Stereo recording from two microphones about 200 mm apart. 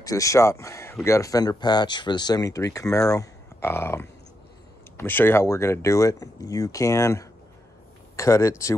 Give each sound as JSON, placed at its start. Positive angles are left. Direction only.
{"t": 0.0, "sound": "speech", "side_deg": 15}